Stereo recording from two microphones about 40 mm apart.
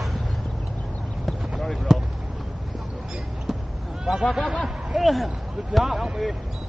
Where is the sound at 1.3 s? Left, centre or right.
Centre.